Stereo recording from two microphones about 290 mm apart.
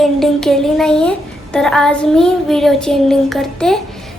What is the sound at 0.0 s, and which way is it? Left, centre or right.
A woman's voice, centre.